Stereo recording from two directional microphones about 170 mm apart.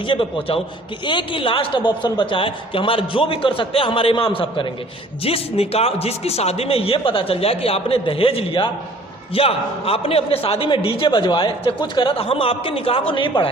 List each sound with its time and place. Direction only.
0.1 s a man's voice: 30° left (ahead or behind)